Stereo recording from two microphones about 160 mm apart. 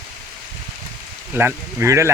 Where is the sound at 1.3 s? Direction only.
15° right (ahead or behind).